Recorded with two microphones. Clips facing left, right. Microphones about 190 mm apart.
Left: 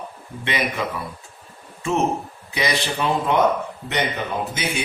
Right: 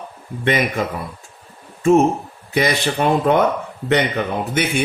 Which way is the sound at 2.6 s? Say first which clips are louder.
Right 5 dB; 50° right (ahead or behind).